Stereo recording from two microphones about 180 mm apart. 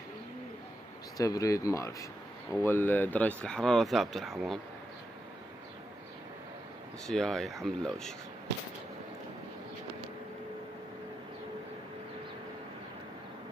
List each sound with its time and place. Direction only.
1.1 s speech: 20° left (ahead or behind); by 4.6 s centre (ahead or behind)
7.1 s speech: 5° left (ahead or behind)